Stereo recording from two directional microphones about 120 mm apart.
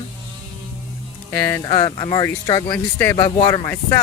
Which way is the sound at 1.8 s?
35° left (ahead or behind).